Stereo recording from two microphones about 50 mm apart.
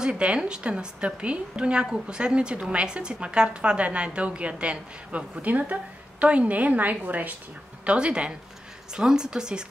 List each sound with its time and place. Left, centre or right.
0.0 s a woman's voice: centre
7.8 s a woman's voice: right